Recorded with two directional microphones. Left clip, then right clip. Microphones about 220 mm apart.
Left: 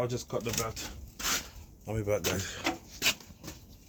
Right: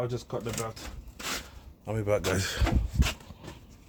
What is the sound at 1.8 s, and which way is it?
Speech, 30° right (ahead or behind).